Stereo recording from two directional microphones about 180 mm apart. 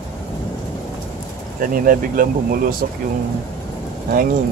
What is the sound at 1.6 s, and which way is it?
Speech, 50° right (ahead or behind).